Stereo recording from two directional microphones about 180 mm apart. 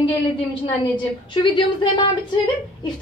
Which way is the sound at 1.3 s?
25° left (ahead or behind).